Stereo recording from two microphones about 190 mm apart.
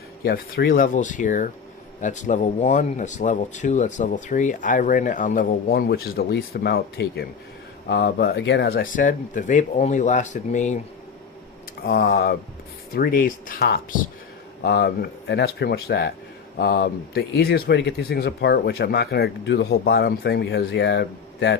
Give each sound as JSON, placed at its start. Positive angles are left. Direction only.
{"t": 0.3, "sound": "speech", "side_deg": 50}
{"t": 11.9, "sound": "speech", "side_deg": 55}